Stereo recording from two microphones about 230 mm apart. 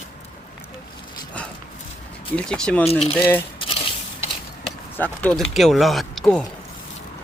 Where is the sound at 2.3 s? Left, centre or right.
Centre.